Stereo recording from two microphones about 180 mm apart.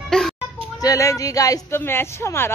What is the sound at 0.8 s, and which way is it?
Speech, 20° left (ahead or behind).